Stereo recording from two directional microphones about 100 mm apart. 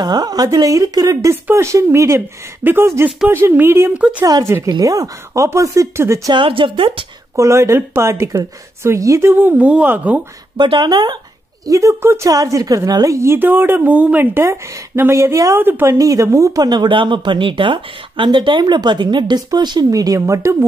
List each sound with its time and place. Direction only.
0.0 s a woman's voice: 45° right (ahead or behind); by 3.9 s 25° right (ahead or behind)
4.2 s speech: 40° right (ahead or behind)
6.3 s speech: 60° right (ahead or behind)
7.3 s a woman's voice: 30° right (ahead or behind)
10.6 s speech: 50° right (ahead or behind)
11.6 s a woman's voice: 35° right (ahead or behind)
16.0 s speech: 35° right (ahead or behind)